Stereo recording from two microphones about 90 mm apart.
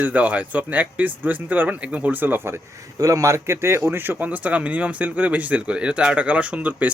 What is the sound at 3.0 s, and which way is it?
Speech, 35° right (ahead or behind).